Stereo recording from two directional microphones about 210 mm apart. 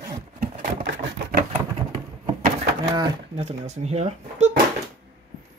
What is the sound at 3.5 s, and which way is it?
Speech, 30° right (ahead or behind).